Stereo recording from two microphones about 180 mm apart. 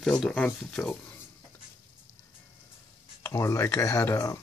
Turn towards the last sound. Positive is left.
turn(degrees=15)  # may be behind; listen again after turning